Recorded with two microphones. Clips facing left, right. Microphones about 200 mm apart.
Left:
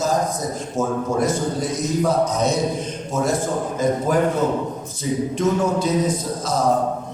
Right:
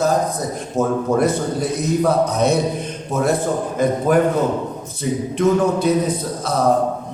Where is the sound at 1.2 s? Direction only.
60° right (ahead or behind).